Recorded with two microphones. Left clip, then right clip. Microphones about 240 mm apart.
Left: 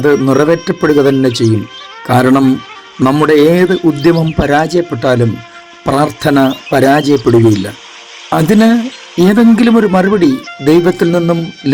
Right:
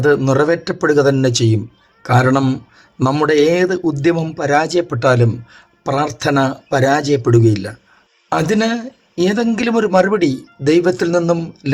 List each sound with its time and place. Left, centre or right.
0.0 s speech: centre
5.8 s speech: left